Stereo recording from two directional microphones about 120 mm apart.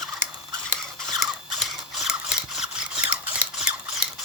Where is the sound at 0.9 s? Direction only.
Centre (ahead or behind).